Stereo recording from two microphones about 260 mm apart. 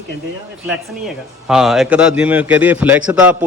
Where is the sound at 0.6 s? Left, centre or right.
Centre.